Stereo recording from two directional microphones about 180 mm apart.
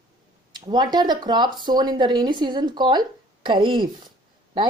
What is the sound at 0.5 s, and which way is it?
Speech, 25° right (ahead or behind).